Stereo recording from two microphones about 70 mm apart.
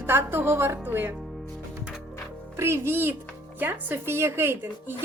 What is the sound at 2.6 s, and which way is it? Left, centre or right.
A woman's voice, right.